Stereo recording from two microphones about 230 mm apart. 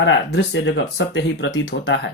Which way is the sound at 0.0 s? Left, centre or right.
Left.